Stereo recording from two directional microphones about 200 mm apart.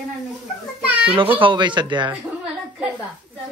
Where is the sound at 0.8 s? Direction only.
5° right (ahead or behind).